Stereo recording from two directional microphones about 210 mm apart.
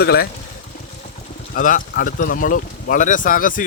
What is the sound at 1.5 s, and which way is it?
Speech, 40° left (ahead or behind).